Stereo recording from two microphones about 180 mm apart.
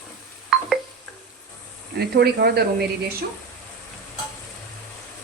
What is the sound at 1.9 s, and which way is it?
Speech, 65° right (ahead or behind).